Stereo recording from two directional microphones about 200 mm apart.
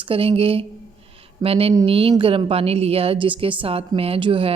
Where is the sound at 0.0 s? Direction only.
25° right (ahead or behind).